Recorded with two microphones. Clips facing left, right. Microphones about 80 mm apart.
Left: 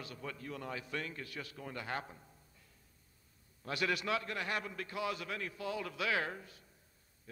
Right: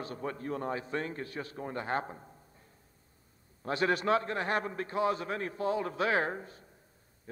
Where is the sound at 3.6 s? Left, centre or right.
Right.